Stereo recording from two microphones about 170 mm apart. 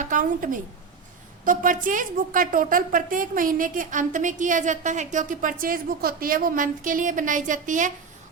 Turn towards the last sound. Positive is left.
turn(degrees=-50)  # may be behind; listen again after turning